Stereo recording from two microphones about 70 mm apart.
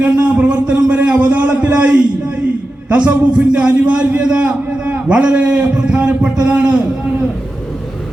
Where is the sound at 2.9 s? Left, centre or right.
Centre.